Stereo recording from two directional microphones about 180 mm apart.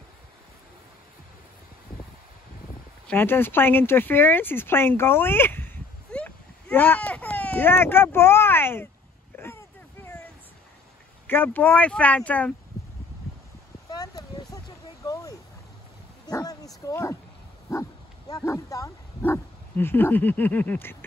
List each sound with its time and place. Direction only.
3.1 s speech: 10° left (ahead or behind)
9.4 s a sound: 15° left (ahead or behind)
11.2 s speech: 10° left (ahead or behind)
13.8 s a sound: 20° left (ahead or behind)
16.3 s bow-wow: 20° left (ahead or behind)
17.7 s dog: 20° left (ahead or behind)
18.3 s speech: 15° left (ahead or behind)